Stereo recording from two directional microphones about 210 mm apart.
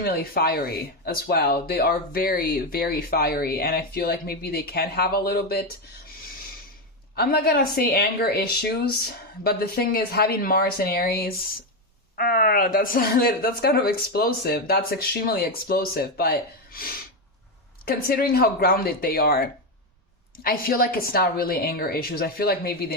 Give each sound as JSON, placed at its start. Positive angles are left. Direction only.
{"t": 0.0, "sound": "speech", "side_deg": 45}
{"t": 7.2, "sound": "speech", "side_deg": 45}